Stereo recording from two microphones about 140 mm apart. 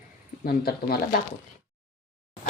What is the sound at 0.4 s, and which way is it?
Speech, 90° left.